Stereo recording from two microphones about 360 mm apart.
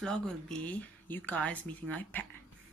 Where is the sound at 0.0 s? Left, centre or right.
Centre.